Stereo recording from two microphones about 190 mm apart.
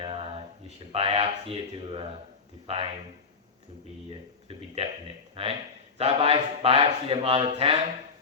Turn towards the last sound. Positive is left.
turn(degrees=-30)  # may be behind; listen again after turning